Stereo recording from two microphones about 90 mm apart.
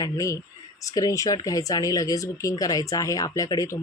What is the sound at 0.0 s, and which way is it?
Speech, 35° left (ahead or behind).